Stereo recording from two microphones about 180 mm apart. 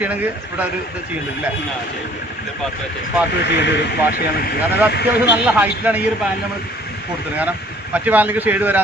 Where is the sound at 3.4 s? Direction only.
75° left (ahead or behind).